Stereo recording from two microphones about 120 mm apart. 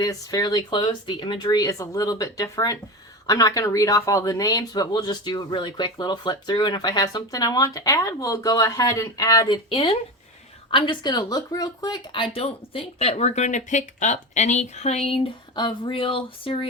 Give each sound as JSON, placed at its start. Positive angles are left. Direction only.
{"t": 0.0, "sound": "speech", "side_deg": 30}
{"t": 9.6, "sound": "speech", "side_deg": 50}
{"t": 12.1, "sound": "speech", "side_deg": 50}